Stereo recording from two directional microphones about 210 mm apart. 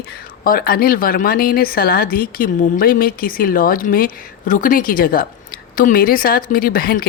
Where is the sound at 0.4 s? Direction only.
45° left (ahead or behind).